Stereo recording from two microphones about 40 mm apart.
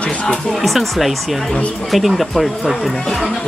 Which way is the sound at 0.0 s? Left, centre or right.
Left.